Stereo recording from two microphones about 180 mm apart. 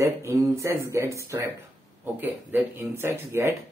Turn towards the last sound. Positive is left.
turn(degrees=-15)  # may be behind; listen again after turning